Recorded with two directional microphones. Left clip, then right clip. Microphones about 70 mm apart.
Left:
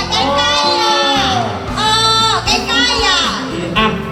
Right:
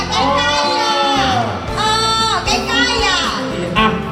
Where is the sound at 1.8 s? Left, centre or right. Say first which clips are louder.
Left 3 dB; left.